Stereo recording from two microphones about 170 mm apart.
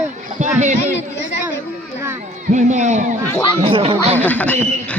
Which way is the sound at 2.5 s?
45° right (ahead or behind).